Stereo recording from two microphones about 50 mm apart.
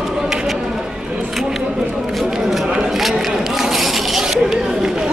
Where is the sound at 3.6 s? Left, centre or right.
Centre.